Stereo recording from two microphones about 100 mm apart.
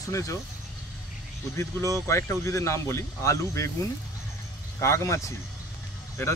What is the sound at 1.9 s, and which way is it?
Speech, 30° left (ahead or behind).